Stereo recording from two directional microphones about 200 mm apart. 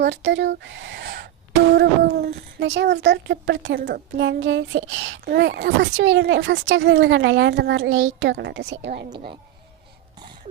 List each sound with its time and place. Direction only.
0.0 s a woman's voice: 60° right (ahead or behind)
9.0 s speech: 25° right (ahead or behind)